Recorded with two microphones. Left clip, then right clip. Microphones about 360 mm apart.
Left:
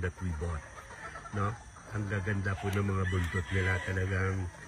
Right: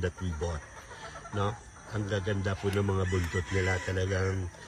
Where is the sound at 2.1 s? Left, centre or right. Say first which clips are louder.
Right 3 dB; centre.